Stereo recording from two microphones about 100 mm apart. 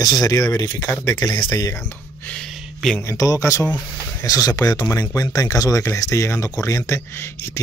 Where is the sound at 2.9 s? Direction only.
30° left (ahead or behind).